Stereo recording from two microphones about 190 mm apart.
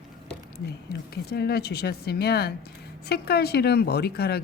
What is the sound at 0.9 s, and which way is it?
Speech, 55° left (ahead or behind).